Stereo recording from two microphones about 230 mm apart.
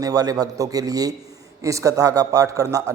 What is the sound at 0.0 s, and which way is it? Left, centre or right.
A man's voice, centre.